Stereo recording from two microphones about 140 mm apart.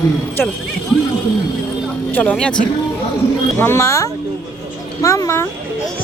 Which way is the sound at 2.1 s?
5° left (ahead or behind).